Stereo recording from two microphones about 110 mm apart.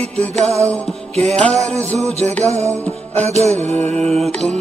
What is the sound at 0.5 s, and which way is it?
Music, 25° right (ahead or behind).